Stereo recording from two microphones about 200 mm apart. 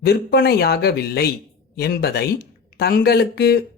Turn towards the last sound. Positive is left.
turn(degrees=55)  # may be behind; listen again after turning